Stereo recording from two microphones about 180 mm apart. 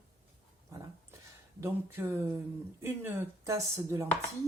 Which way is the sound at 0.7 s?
15° right (ahead or behind).